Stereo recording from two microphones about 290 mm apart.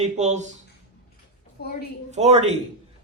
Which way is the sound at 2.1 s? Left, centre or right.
Right.